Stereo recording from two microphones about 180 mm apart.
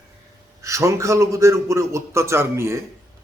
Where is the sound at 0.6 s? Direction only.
15° right (ahead or behind).